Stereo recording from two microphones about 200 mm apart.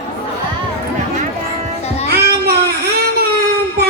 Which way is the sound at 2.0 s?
50° right (ahead or behind).